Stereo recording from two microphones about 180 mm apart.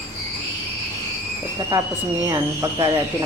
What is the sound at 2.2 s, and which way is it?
Speech, 15° right (ahead or behind).